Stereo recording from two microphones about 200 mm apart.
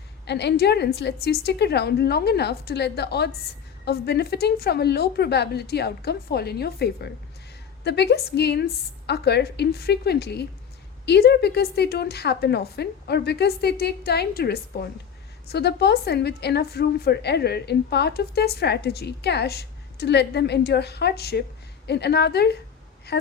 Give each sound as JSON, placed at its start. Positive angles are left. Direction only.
{"t": 0.3, "sound": "a woman's voice", "side_deg": 55}